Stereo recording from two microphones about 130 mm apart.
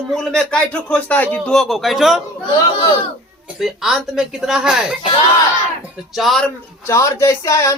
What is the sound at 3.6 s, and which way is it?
Speech, centre (ahead or behind).